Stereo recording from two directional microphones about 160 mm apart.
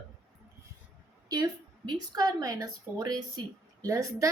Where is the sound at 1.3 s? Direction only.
25° right (ahead or behind).